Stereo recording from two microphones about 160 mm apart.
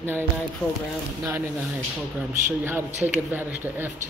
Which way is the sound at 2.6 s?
10° right (ahead or behind).